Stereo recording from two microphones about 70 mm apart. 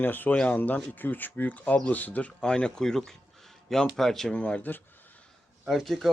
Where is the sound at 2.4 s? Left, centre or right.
Centre.